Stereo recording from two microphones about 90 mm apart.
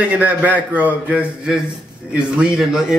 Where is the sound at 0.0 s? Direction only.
15° right (ahead or behind).